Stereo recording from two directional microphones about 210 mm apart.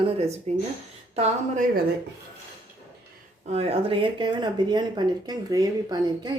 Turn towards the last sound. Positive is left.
turn(degrees=-20)  # may be behind; listen again after turning